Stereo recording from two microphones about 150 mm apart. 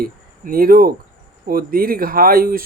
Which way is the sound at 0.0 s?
75° right (ahead or behind).